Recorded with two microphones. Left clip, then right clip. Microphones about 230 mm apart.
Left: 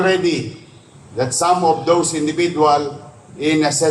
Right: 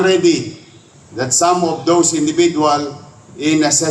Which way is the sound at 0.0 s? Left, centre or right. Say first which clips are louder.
Right 3 dB; right.